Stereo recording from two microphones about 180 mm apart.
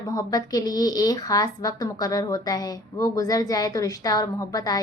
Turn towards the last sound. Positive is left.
turn(degrees=20)  # may be behind; listen again after turning